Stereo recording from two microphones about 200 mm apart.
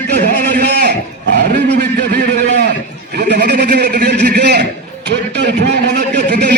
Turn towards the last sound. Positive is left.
turn(degrees=-55)  # may be behind; listen again after turning